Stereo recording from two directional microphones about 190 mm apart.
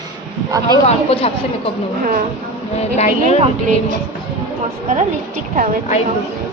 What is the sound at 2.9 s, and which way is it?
Speech, 35° left (ahead or behind).